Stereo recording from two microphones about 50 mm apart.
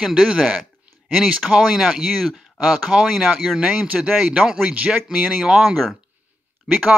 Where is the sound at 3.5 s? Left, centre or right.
Right.